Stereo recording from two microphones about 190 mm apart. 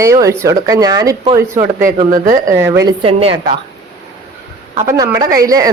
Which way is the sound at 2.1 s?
45° right (ahead or behind).